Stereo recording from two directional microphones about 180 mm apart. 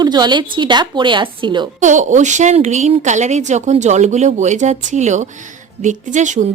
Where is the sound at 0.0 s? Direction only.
25° right (ahead or behind).